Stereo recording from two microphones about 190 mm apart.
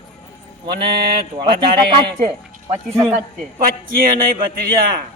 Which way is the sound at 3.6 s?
50° right (ahead or behind).